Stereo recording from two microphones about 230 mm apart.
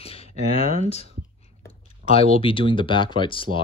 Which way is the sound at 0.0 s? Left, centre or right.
Left.